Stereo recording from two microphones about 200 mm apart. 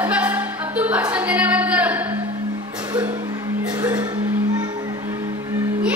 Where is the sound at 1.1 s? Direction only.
5° right (ahead or behind).